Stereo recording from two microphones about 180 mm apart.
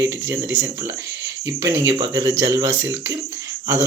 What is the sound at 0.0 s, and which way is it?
Speech, 15° right (ahead or behind).